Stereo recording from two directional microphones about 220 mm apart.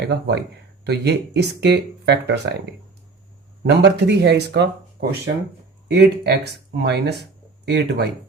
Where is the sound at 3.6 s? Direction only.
50° right (ahead or behind).